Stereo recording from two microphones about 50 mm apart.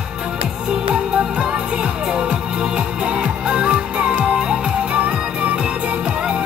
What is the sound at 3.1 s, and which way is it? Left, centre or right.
Music, centre.